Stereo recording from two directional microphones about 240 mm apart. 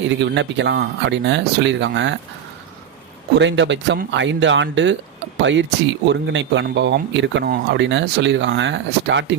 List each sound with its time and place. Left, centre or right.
0.1 s speech: right
3.3 s speech: right